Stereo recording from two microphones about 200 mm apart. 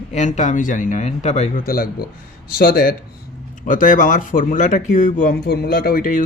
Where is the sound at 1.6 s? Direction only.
50° left (ahead or behind).